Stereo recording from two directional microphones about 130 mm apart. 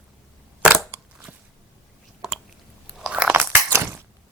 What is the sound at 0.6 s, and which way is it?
Crushing, 10° right (ahead or behind).